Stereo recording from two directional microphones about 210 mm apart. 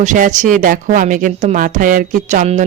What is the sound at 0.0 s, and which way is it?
Speech, 35° right (ahead or behind).